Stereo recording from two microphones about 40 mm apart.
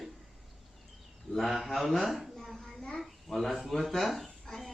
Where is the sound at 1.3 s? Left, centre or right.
Centre.